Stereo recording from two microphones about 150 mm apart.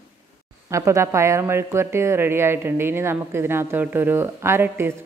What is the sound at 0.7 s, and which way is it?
Speech, 20° right (ahead or behind).